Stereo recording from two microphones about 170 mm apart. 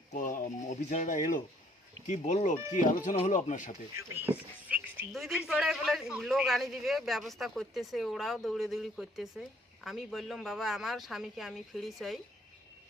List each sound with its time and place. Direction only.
0.1 s speech: 50° left (ahead or behind)
3.9 s speech: 15° right (ahead or behind)
5.1 s speech: centre (ahead or behind)